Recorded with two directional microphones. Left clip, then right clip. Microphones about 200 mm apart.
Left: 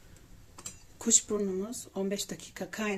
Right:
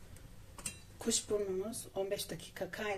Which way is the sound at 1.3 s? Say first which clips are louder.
Left 3 dB; 35° left (ahead or behind).